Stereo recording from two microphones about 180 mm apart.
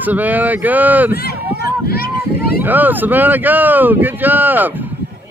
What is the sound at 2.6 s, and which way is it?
Speech, 10° right (ahead or behind).